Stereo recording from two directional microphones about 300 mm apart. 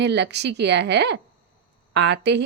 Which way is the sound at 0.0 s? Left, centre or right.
Right.